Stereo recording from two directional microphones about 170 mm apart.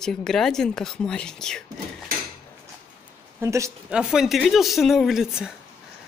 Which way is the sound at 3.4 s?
15° right (ahead or behind).